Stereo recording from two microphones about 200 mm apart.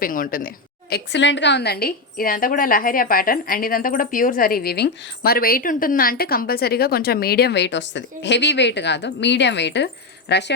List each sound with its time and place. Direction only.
0.0 s a woman's voice: 45° left (ahead or behind)